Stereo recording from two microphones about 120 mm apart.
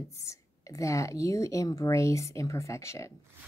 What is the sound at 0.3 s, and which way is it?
Speech, 25° left (ahead or behind).